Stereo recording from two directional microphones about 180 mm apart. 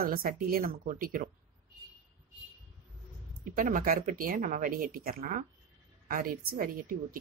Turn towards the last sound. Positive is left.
turn(degrees=-55)  # may be behind; listen again after turning